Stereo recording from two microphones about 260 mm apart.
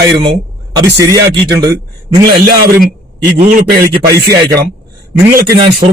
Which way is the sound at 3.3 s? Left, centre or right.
Right.